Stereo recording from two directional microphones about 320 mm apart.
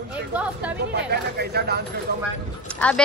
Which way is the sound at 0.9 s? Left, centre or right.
Right.